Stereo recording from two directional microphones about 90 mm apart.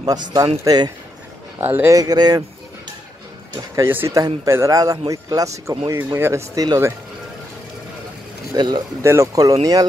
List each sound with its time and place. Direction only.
0.0 s speech: 45° right (ahead or behind)
1.6 s speech: 25° right (ahead or behind)
1.9 s speech: 45° right (ahead or behind)
3.8 s speech: 25° right (ahead or behind)
6.1 s speech: 30° right (ahead or behind)
6.5 s speech: 45° right (ahead or behind)
8.5 s speech: 55° right (ahead or behind)
9.0 s speech: 30° right (ahead or behind)